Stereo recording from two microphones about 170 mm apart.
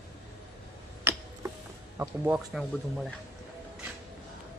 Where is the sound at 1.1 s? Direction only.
15° right (ahead or behind).